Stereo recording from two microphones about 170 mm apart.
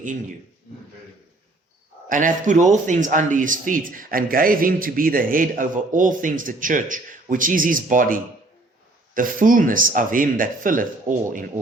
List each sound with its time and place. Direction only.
2.0 s a man's voice: 50° right (ahead or behind)